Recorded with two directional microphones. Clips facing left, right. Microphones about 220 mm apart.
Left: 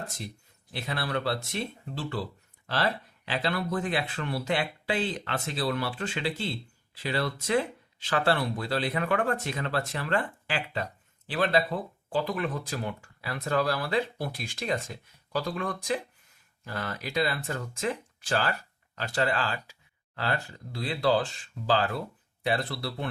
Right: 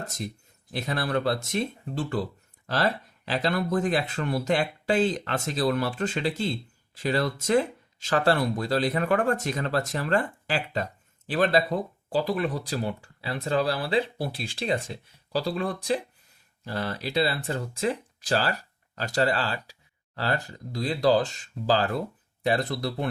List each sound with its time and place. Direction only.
0.7 s speech: 40° right (ahead or behind)
22.4 s speech: 40° right (ahead or behind)